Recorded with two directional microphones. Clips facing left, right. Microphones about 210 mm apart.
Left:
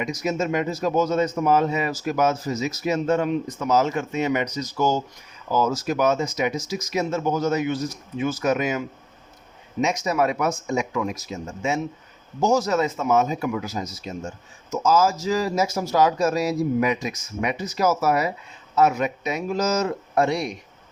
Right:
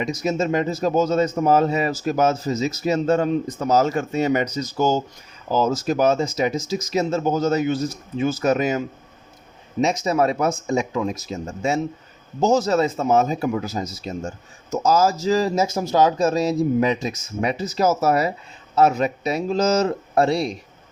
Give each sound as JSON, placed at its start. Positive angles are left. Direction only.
{"t": 0.0, "sound": "speech", "side_deg": -30}
{"t": 4.5, "sound": "speech", "side_deg": -25}
{"t": 9.8, "sound": "speech", "side_deg": -30}
{"t": 11.6, "sound": "speech", "side_deg": -35}
{"t": 12.4, "sound": "speech", "side_deg": -25}